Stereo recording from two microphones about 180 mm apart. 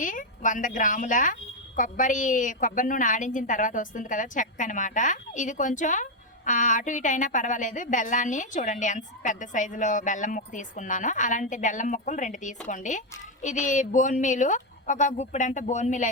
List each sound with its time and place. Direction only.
0.0 s a woman's voice: 50° left (ahead or behind)